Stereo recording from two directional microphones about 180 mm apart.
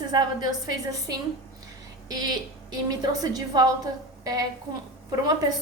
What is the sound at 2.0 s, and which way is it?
A woman's voice, 20° right (ahead or behind).